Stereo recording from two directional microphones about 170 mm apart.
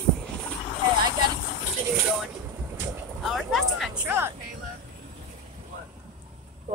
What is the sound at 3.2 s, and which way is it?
Speech, centre (ahead or behind).